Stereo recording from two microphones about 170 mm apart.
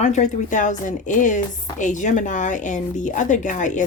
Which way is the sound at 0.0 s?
45° left (ahead or behind).